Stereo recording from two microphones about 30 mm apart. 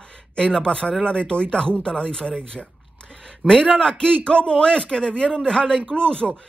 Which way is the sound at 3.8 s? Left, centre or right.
Left.